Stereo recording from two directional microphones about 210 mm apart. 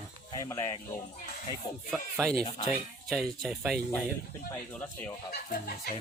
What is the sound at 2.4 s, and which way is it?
Speech, 25° left (ahead or behind).